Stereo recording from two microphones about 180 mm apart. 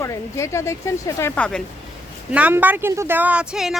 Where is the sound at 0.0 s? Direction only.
15° left (ahead or behind).